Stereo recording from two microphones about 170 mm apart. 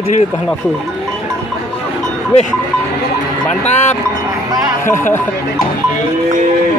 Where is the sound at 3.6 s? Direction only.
40° left (ahead or behind).